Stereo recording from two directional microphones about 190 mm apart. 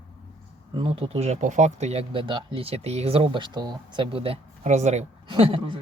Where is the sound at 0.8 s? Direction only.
30° right (ahead or behind).